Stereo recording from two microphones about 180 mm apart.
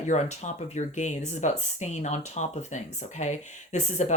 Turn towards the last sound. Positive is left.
turn(degrees=40)  # may be behind; listen again after turning